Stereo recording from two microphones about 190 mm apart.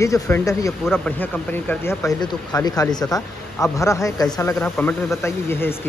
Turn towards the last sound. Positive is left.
turn(degrees=10)  # may be behind; listen again after turning